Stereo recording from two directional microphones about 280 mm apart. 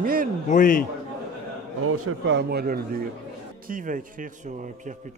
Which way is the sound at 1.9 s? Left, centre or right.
Right.